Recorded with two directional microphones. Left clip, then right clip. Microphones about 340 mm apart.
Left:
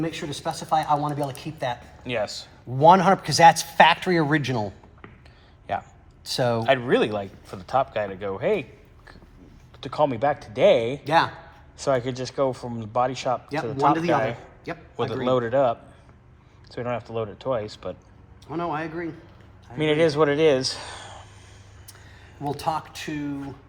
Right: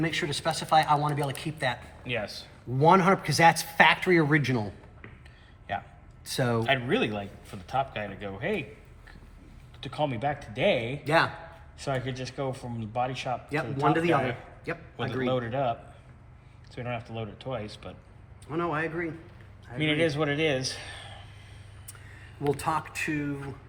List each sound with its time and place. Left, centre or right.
0.0 s speech: centre
6.2 s speech: centre
10.1 s a man's voice: centre
22.4 s speech: centre